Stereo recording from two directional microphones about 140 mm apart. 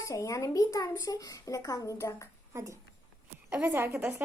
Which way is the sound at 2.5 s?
20° right (ahead or behind).